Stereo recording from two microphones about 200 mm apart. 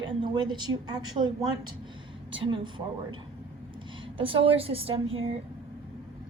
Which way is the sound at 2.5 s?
25° right (ahead or behind).